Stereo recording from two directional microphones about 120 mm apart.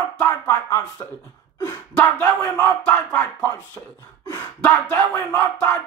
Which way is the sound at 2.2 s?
20° left (ahead or behind).